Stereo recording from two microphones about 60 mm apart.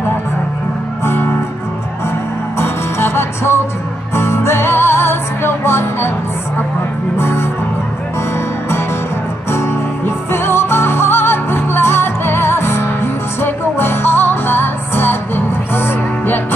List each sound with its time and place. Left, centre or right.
1.0 s music: left
2.6 s music: left
7.2 s music: left
9.5 s music: left